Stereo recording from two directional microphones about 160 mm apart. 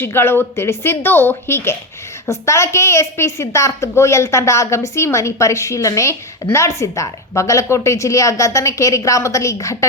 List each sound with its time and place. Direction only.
0.0 s a woman's voice: 15° left (ahead or behind)